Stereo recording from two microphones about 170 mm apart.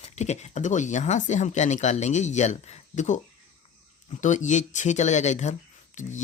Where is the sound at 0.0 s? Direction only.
40° left (ahead or behind).